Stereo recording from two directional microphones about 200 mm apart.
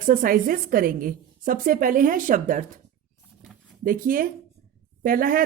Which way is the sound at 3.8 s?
45° right (ahead or behind).